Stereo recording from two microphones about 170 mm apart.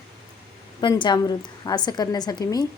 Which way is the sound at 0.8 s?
25° left (ahead or behind).